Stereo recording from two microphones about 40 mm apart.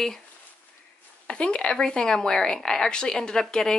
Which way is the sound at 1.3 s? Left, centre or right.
Left.